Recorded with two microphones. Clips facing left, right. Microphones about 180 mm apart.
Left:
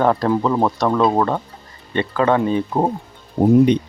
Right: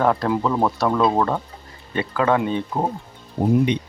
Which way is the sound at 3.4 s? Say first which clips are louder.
Left 5 dB; 50° left (ahead or behind).